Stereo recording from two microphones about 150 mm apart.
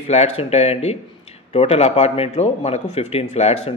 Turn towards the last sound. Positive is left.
turn(degrees=45)  # may be behind; listen again after turning